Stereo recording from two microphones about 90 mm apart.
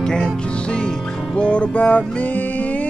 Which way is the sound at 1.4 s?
10° left (ahead or behind).